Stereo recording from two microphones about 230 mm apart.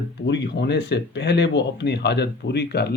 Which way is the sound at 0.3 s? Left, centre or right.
Left.